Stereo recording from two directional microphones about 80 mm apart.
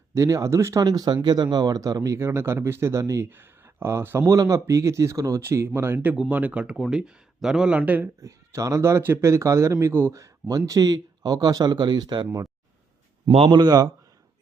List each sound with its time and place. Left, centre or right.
0.1 s a man's voice: right
0.8 s speech: right
2.0 s a man's voice: right
3.2 s speech: right
4.3 s a man's voice: right
6.1 s speech: centre
7.8 s speech: right
8.2 s a man's voice: right
10.5 s speech: right